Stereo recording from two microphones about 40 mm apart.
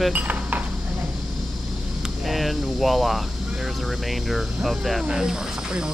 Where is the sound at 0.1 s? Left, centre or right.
Right.